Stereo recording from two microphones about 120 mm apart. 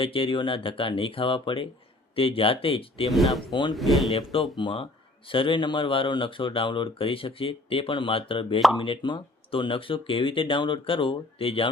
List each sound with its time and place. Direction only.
0.0 s speech: 45° left (ahead or behind)
3.5 s speech: 35° left (ahead or behind)
3.8 s speech: centre (ahead or behind)
4.5 s speech: 40° left (ahead or behind)